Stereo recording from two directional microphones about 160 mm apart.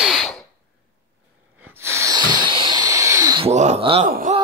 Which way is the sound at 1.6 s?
15° right (ahead or behind).